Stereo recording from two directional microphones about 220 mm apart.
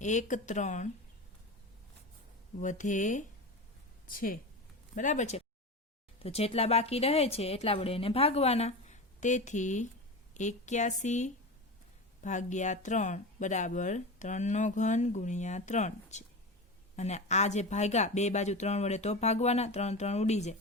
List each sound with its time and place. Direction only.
0.0 s speech: 35° left (ahead or behind)
2.6 s speech: 35° left (ahead or behind)